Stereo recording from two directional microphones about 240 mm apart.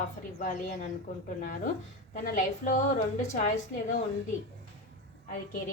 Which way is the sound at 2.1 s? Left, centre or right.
Left.